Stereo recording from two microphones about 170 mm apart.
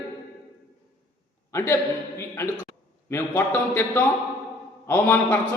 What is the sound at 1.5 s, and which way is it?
A man's voice, 15° left (ahead or behind).